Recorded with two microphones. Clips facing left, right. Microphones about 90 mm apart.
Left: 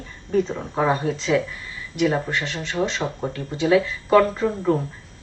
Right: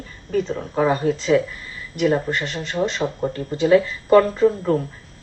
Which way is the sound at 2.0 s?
Centre (ahead or behind).